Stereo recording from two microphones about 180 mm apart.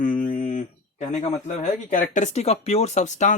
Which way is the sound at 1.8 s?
45° left (ahead or behind).